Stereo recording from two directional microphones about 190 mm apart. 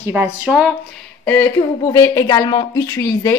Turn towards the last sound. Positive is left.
turn(degrees=15)  # may be behind; listen again after turning